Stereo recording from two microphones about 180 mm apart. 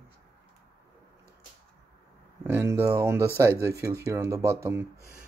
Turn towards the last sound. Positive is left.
turn(degrees=-15)  # may be behind; listen again after turning